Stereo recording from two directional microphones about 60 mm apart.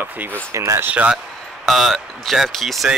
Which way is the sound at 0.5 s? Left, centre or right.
Right.